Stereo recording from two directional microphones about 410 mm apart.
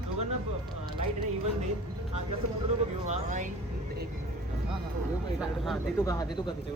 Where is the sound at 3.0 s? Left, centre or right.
Centre.